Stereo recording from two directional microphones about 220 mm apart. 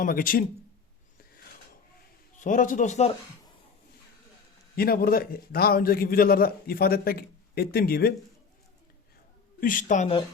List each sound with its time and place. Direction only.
0.0 s a woman's voice: 40° left (ahead or behind)
2.4 s a woman's voice: 35° left (ahead or behind)
4.8 s a man's voice: 40° left (ahead or behind)
9.6 s a woman's voice: 40° left (ahead or behind)